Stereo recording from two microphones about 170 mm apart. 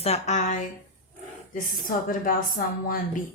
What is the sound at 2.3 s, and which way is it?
Speech, 55° left (ahead or behind).